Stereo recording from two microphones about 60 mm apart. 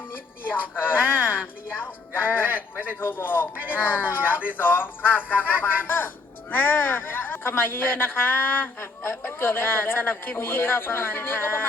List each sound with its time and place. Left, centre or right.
0.5 s speech: left
2.5 s speech: right
3.0 s speech: left